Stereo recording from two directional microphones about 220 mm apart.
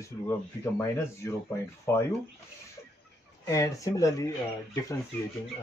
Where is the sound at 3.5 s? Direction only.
15° left (ahead or behind).